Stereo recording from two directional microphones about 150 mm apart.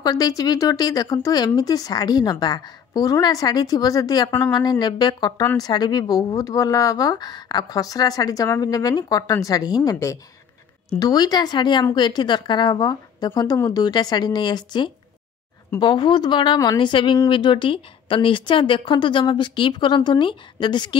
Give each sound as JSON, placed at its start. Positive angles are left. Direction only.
{"t": 0.0, "sound": "a woman's voice", "side_deg": 25}